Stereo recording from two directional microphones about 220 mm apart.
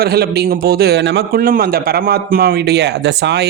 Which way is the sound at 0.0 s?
45° right (ahead or behind).